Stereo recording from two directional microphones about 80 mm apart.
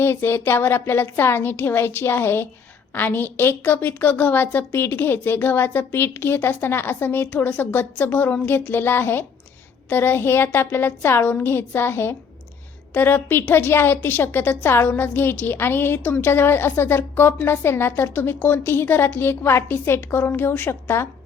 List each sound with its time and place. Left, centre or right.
0.0 s a woman's voice: left